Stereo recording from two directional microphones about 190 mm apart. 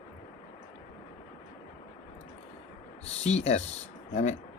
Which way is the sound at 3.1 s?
35° left (ahead or behind).